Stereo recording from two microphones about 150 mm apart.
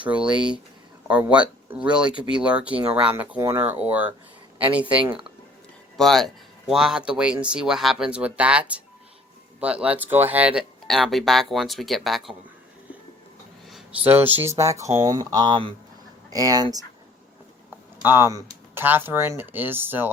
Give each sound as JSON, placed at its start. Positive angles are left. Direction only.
{"t": 0.0, "sound": "speech", "side_deg": -5}
{"t": 6.0, "sound": "speech", "side_deg": 0}
{"t": 14.0, "sound": "speech", "side_deg": -15}
{"t": 17.7, "sound": "speech", "side_deg": -15}